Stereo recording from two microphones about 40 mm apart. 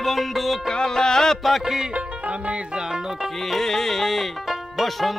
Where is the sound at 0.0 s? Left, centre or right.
Centre.